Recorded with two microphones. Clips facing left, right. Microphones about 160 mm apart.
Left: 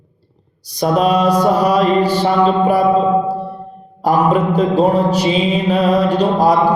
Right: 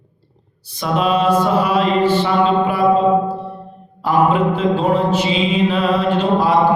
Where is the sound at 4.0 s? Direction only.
40° left (ahead or behind).